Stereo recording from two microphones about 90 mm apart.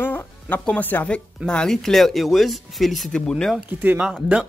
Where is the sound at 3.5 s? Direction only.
20° right (ahead or behind).